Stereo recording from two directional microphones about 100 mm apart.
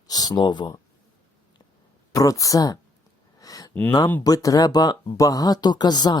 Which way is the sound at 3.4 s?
40° left (ahead or behind).